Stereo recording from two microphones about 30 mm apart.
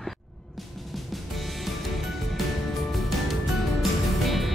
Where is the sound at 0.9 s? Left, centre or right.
Centre.